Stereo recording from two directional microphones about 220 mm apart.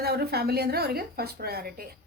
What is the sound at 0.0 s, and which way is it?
Speech, 45° right (ahead or behind).